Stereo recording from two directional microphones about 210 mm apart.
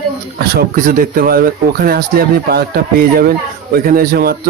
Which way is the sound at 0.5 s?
40° right (ahead or behind).